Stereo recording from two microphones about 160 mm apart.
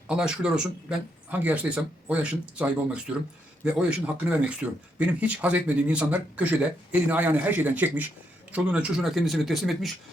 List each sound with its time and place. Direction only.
0.1 s speech: 5° right (ahead or behind)